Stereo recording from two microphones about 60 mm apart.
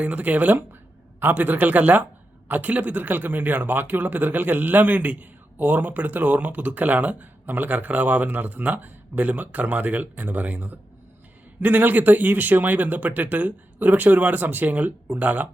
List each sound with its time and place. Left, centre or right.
0.0 s speech: right